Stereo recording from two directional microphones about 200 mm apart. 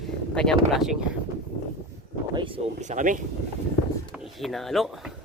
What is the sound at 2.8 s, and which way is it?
Speech, 40° right (ahead or behind).